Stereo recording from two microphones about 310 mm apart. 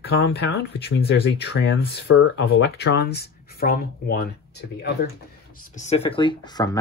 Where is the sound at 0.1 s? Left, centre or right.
Left.